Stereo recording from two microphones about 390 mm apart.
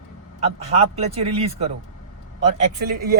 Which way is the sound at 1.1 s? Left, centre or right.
Centre.